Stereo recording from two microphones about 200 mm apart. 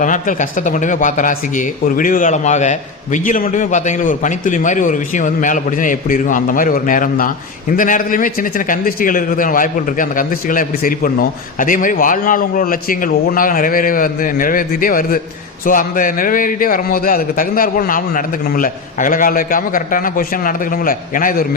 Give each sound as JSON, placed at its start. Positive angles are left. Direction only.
{"t": 0.0, "sound": "a man's voice", "side_deg": 40}